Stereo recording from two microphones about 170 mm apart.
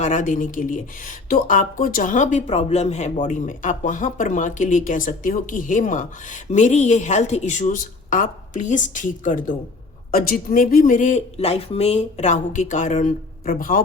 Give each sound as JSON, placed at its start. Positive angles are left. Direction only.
{"t": 0.0, "sound": "speech", "side_deg": 50}